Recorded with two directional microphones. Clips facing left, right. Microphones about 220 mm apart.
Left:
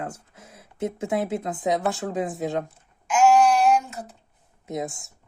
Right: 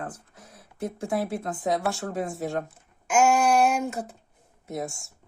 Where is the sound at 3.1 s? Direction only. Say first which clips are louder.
Left 3 dB; 50° right (ahead or behind).